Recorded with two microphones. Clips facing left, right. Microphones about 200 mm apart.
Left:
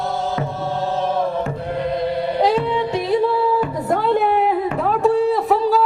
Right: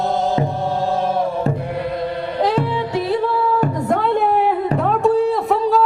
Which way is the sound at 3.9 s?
Centre (ahead or behind).